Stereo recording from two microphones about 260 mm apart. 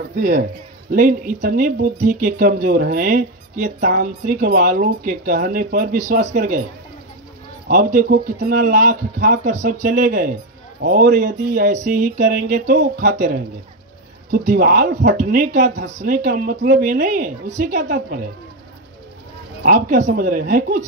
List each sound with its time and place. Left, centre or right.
0.2 s speech: right
7.6 s speech: right
19.6 s speech: right